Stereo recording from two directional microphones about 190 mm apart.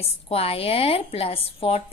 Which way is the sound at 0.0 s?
30° left (ahead or behind).